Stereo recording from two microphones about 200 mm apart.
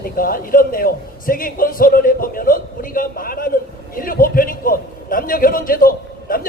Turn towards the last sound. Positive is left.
turn(degrees=45)  # may be behind; listen again after turning